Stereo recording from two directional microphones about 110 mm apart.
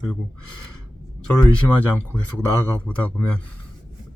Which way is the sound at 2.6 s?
15° left (ahead or behind).